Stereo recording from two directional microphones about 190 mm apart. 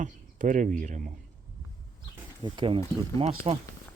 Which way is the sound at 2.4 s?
25° right (ahead or behind).